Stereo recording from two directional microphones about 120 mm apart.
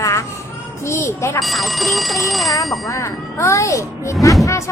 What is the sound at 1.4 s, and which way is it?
Speech, centre (ahead or behind).